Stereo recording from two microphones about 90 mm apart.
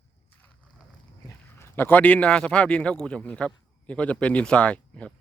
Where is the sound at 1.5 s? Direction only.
25° left (ahead or behind).